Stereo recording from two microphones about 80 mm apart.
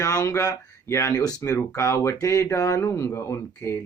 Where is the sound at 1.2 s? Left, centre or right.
Left.